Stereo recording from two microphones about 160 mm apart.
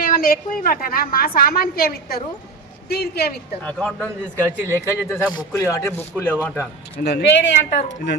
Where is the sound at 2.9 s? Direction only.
85° left.